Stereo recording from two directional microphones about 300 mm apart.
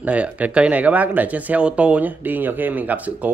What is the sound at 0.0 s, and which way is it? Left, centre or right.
Speech, centre.